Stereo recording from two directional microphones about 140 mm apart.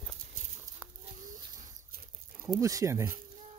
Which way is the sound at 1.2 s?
70° right (ahead or behind).